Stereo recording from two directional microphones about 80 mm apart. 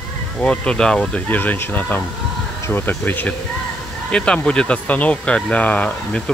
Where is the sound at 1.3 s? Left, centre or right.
Left.